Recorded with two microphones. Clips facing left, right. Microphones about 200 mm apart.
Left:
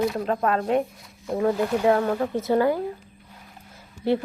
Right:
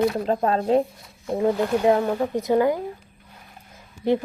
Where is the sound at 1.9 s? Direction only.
15° right (ahead or behind).